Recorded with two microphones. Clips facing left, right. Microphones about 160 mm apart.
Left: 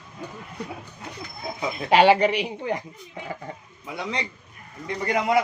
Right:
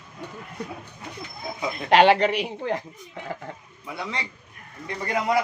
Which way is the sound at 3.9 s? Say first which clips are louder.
Left 2 dB; 20° left (ahead or behind).